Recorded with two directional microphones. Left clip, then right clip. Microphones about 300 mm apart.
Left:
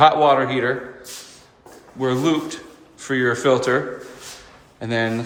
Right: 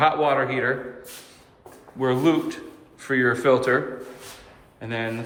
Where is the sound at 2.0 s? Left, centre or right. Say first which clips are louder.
Left 1 dB; centre.